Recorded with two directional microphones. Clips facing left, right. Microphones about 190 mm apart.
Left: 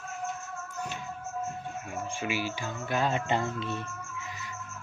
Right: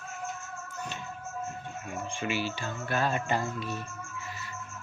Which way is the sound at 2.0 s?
10° left (ahead or behind).